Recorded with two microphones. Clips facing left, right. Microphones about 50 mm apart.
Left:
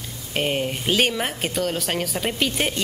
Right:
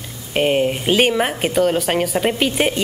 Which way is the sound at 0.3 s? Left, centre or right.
Centre.